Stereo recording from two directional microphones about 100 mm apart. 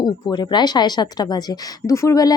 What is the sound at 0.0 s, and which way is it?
A woman's voice, 45° left (ahead or behind).